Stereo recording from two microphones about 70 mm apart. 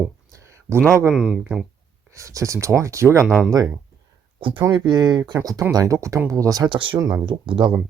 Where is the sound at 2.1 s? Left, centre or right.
Right.